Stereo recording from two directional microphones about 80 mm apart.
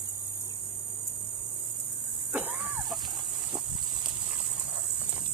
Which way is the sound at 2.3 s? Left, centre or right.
Right.